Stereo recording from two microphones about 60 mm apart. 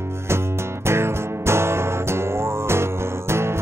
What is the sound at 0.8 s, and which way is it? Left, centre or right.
Music, right.